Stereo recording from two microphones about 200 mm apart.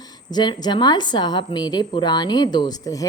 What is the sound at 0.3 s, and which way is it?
A woman's voice, 20° left (ahead or behind).